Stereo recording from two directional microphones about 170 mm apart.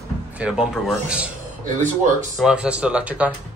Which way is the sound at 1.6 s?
45° right (ahead or behind).